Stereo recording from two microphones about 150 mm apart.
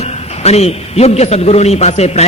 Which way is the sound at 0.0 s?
45° left (ahead or behind).